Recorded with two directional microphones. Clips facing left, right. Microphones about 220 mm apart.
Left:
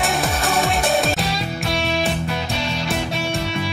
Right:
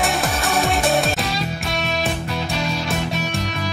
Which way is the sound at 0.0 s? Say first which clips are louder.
Even; centre (ahead or behind).